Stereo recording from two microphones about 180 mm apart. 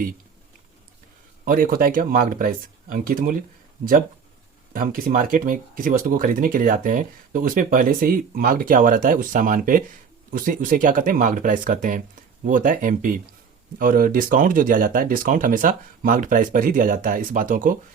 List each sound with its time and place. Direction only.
1.5 s speech: 50° right (ahead or behind)
4.7 s speech: 50° right (ahead or behind)